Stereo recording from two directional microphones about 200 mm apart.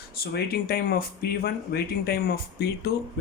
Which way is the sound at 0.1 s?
50° left (ahead or behind).